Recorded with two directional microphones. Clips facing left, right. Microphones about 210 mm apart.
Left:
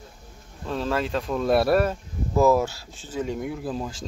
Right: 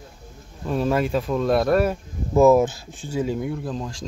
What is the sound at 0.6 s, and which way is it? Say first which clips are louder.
Speech: right 4 dB; 15° right (ahead or behind).